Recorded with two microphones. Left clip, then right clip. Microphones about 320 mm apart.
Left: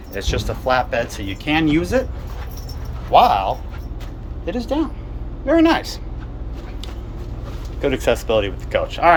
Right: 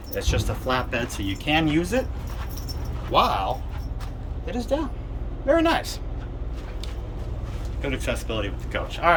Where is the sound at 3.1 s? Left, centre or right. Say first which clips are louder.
Left 8 dB; centre.